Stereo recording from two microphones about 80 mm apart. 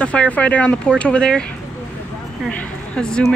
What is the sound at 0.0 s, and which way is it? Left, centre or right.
Speech, centre.